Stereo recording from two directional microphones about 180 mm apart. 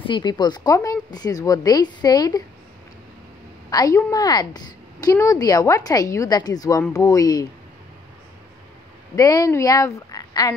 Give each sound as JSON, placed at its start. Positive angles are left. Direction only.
{"t": 0.0, "sound": "a woman's voice", "side_deg": 25}
{"t": 3.7, "sound": "a woman's voice", "side_deg": 20}
{"t": 9.1, "sound": "speech", "side_deg": 20}